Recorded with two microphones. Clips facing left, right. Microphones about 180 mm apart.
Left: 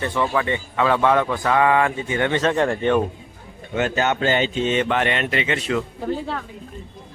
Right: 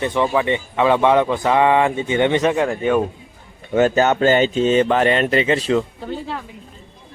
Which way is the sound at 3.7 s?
40° right (ahead or behind).